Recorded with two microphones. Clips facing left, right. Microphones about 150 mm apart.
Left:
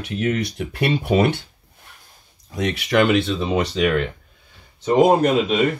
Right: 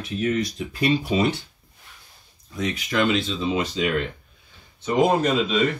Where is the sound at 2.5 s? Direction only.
75° left (ahead or behind).